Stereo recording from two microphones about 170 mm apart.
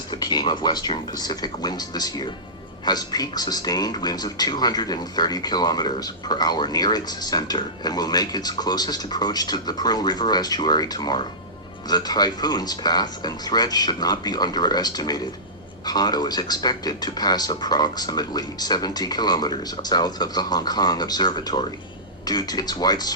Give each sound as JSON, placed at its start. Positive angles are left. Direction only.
{"t": 0.1, "sound": "speech", "side_deg": 25}